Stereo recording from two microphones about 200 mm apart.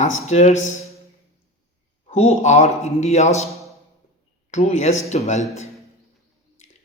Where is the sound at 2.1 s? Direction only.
35° left (ahead or behind).